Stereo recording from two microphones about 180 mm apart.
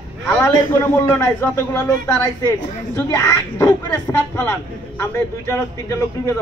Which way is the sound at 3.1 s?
15° left (ahead or behind).